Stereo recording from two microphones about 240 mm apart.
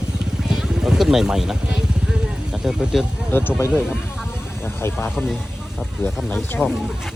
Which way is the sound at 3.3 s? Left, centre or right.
Centre.